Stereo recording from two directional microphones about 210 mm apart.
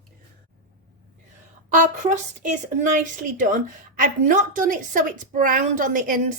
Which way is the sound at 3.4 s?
40° right (ahead or behind).